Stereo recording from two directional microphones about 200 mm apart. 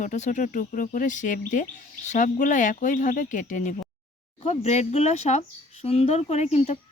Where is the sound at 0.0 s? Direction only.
40° left (ahead or behind).